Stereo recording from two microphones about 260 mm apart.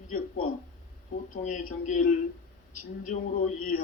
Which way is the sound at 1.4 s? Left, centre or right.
Left.